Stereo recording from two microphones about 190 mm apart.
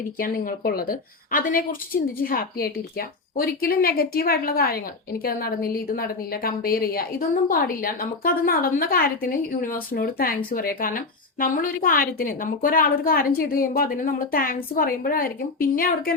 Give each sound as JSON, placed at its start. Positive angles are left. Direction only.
{"t": 0.2, "sound": "a woman's voice", "side_deg": 50}